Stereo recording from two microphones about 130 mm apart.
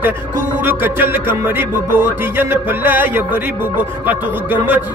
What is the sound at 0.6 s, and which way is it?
Music, 15° right (ahead or behind).